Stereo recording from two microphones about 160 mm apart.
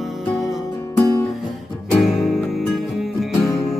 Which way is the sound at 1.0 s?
25° left (ahead or behind).